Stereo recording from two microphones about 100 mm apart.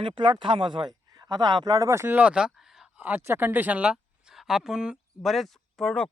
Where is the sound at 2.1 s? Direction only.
10° right (ahead or behind); by 6.1 s 5° left (ahead or behind).